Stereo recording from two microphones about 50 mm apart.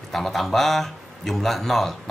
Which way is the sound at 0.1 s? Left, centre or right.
Centre.